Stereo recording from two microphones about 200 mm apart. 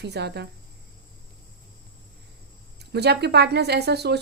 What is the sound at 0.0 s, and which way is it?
Speech, 55° right (ahead or behind).